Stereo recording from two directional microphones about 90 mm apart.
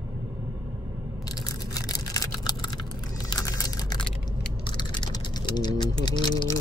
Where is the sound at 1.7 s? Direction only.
40° left (ahead or behind).